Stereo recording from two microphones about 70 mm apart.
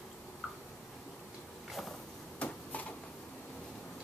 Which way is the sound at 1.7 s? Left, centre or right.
Centre.